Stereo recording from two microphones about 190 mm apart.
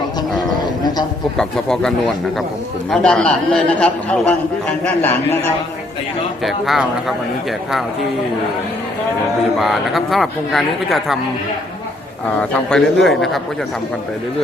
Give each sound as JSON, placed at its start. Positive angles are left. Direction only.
{"t": 0.2, "sound": "a sound", "side_deg": 20}
{"t": 1.4, "sound": "a man's voice", "side_deg": 5}
{"t": 6.4, "sound": "a man's voice", "side_deg": 0}
{"t": 9.6, "sound": "a man's voice", "side_deg": 0}
{"t": 12.4, "sound": "a man's voice", "side_deg": 5}